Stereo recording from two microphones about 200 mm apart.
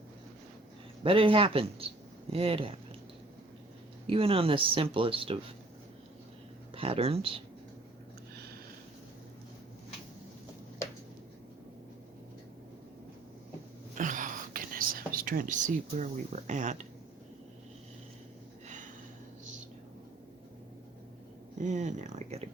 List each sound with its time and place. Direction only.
1.0 s speech: 25° right (ahead or behind)
4.0 s speech: 25° right (ahead or behind)
6.7 s speech: 30° right (ahead or behind)
13.9 s whispering: 40° right (ahead or behind)
21.6 s speech: 35° right (ahead or behind)